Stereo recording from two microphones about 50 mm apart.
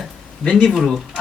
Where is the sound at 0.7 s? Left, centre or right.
Centre.